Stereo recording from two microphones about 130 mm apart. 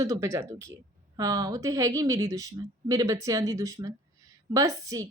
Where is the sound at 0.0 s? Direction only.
25° right (ahead or behind).